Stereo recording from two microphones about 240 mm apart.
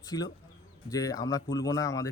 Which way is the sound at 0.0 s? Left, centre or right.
Centre.